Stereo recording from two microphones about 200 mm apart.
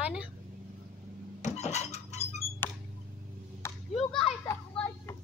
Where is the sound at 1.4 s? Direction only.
35° left (ahead or behind).